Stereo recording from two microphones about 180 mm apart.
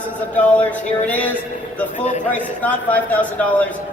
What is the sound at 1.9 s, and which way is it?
Speech, 40° left (ahead or behind).